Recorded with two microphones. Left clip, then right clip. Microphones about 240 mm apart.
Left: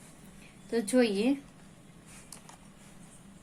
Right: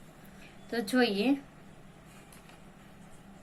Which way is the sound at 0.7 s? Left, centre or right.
Centre.